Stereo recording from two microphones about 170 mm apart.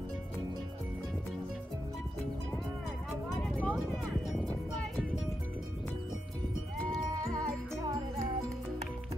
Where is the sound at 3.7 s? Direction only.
Centre (ahead or behind).